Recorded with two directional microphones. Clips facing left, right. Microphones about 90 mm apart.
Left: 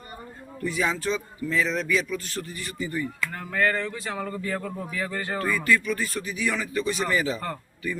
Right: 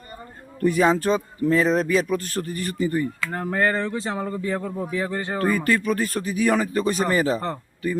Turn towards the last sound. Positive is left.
turn(degrees=-40)  # may be behind; listen again after turning